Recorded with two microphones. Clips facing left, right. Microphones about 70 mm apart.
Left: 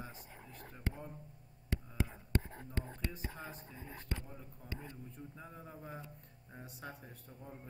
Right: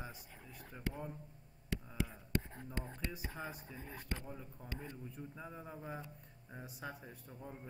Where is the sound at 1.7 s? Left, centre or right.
Left.